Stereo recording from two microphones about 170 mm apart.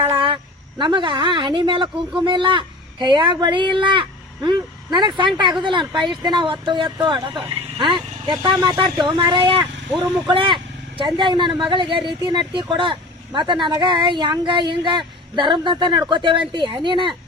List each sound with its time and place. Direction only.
0.8 s speech: 30° right (ahead or behind)